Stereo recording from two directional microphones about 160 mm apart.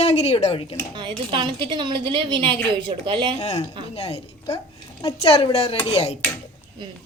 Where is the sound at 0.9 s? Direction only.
30° right (ahead or behind).